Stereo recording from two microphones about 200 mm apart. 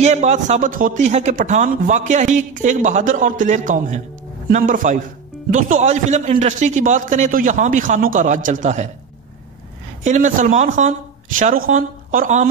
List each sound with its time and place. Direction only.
0.0 s a man's voice: 35° right (ahead or behind)
10.0 s a man's voice: 40° right (ahead or behind)